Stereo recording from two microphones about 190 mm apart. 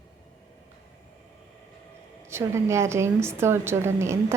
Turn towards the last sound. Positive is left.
turn(degrees=-15)  # may be behind; listen again after turning